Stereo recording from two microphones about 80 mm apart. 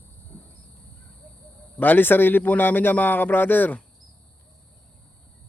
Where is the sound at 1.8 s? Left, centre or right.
Left.